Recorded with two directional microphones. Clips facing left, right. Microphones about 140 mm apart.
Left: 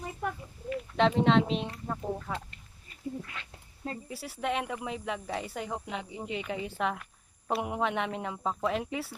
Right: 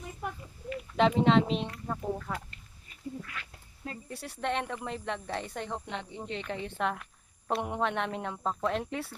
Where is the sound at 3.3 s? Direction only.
30° left (ahead or behind).